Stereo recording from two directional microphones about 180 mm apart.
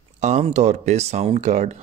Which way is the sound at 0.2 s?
40° right (ahead or behind).